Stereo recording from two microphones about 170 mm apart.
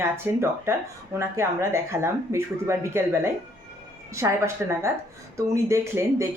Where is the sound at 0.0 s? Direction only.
15° right (ahead or behind).